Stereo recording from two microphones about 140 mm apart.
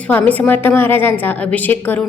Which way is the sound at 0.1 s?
10° left (ahead or behind).